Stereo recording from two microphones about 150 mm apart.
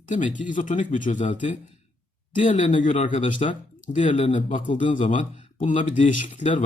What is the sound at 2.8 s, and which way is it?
Speech, 60° left (ahead or behind).